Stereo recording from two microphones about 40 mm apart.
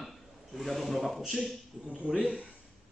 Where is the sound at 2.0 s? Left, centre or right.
Right.